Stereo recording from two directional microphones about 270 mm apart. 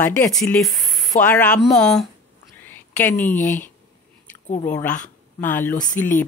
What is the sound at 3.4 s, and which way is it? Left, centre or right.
Speech, left.